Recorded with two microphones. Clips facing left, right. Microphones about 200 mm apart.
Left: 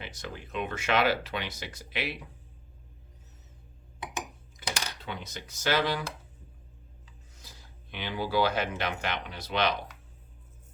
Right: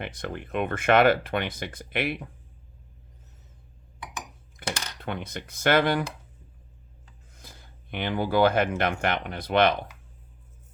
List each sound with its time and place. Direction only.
0.0 s speech: 55° right (ahead or behind)
4.6 s coin: 55° right (ahead or behind)
5.0 s speech: 55° right (ahead or behind)